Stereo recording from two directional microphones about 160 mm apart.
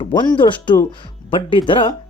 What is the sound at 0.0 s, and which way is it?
Speech, 25° left (ahead or behind).